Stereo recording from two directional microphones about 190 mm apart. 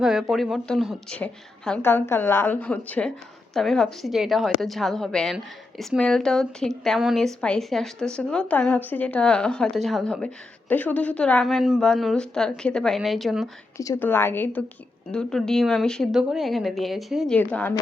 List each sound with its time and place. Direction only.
0.0 s a woman's voice: 5° right (ahead or behind)
13.7 s a woman's voice: 15° left (ahead or behind)